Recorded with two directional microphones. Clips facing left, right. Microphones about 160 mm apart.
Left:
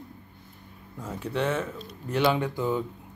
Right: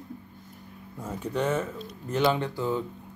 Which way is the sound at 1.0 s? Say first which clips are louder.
Even; 10° right (ahead or behind).